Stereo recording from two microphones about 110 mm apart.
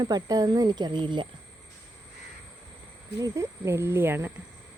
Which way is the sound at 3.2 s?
30° right (ahead or behind).